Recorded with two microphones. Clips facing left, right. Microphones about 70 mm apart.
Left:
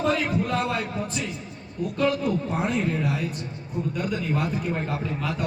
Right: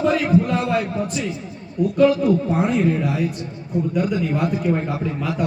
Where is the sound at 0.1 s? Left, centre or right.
Centre.